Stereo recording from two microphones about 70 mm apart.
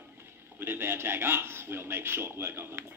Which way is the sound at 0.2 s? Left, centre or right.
Right.